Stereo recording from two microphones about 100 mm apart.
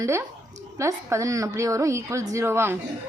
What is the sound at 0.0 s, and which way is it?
A woman's voice, 30° right (ahead or behind).